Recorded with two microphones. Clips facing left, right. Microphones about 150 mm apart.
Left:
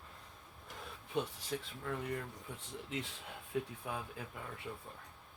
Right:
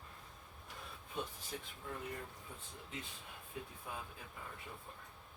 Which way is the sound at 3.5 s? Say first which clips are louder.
Left 10 dB; 90° left.